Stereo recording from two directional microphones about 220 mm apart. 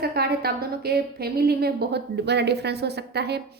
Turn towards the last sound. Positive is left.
turn(degrees=-50)  # may be behind; listen again after turning